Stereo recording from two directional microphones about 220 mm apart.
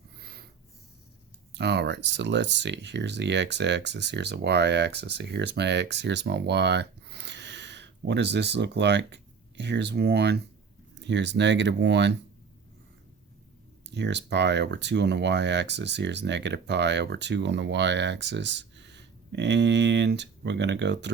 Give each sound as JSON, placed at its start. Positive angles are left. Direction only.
{"t": 0.2, "sound": "snort", "side_deg": -45}
{"t": 1.5, "sound": "speech", "side_deg": -50}
{"t": 13.9, "sound": "speech", "side_deg": -50}